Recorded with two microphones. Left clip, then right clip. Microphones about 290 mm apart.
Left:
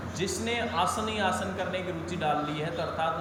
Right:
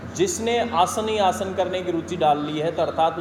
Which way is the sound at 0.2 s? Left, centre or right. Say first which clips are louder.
Right 9 dB; centre.